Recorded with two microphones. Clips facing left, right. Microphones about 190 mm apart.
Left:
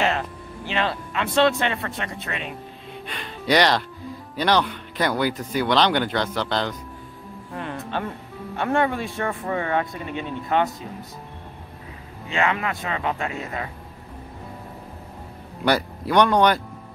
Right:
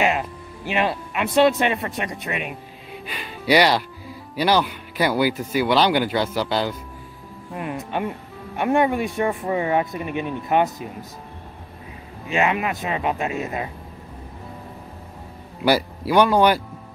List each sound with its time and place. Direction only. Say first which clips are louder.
0.0 s speech: right 2 dB; 10° right (ahead or behind)
3.1 s music: right 2 dB; 5° right (ahead or behind)
4.4 s speech: right 1 dB; 5° right (ahead or behind)
12.3 s speech: right 2 dB; 20° right (ahead or behind)
15.6 s speech: right 2 dB; 5° right (ahead or behind)